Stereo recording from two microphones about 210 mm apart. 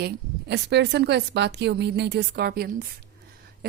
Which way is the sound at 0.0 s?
55° right (ahead or behind).